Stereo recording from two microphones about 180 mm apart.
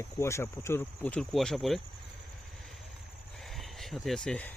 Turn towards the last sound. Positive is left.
turn(degrees=5)  # may be behind; listen again after turning